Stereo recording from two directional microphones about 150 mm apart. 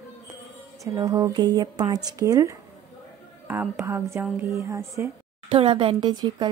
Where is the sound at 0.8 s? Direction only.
25° right (ahead or behind).